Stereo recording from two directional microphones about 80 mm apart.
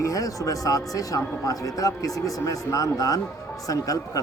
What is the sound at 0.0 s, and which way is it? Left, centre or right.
Speech, left.